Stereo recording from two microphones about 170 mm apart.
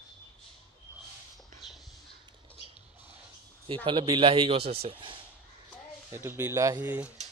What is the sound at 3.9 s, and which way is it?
A man's voice, 30° right (ahead or behind).